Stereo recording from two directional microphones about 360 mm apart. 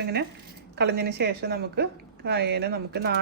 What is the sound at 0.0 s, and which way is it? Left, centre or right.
A woman's voice, right.